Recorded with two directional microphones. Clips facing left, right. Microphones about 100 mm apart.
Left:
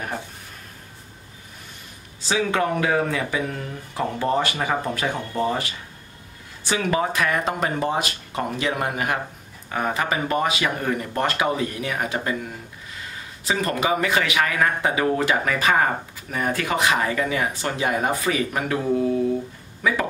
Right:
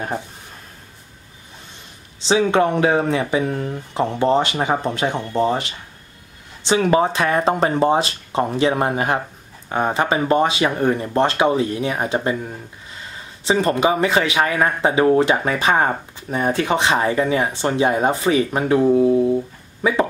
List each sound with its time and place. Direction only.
2.2 s speech: 25° right (ahead or behind)